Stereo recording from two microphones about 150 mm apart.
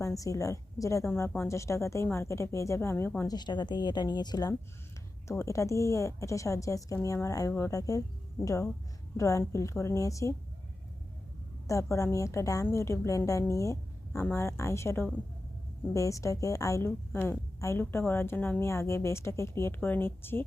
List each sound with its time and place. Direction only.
0.0 s a woman's voice: 20° left (ahead or behind)
3.3 s a woman's voice: 30° left (ahead or behind)
11.7 s a woman's voice: 20° left (ahead or behind)